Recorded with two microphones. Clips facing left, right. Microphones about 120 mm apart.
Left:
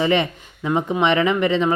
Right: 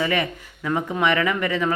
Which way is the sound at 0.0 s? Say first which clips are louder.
Left 4 dB; 25° left (ahead or behind).